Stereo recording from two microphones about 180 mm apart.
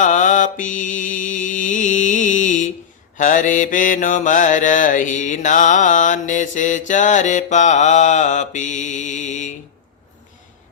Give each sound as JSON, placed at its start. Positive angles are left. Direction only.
{"t": 0.0, "sound": "mantra", "side_deg": 45}